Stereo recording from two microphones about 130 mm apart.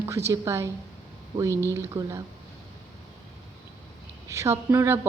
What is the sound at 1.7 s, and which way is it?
Speech, 25° right (ahead or behind).